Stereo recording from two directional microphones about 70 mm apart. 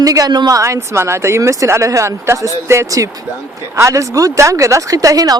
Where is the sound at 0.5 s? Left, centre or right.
Right.